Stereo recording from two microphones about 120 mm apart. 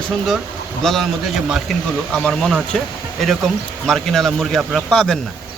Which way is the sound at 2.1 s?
5° left (ahead or behind).